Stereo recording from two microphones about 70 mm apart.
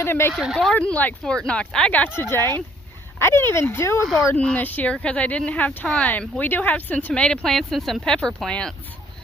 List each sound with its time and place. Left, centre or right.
0.0 s speech: left
0.5 s speech: centre
0.8 s speech: left
2.3 s speech: left
4.4 s speech: left
7.1 s speech: centre